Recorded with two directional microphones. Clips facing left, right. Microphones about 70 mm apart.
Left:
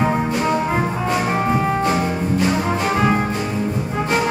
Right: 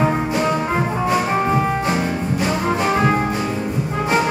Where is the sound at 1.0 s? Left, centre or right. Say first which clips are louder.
Right 3 dB; centre.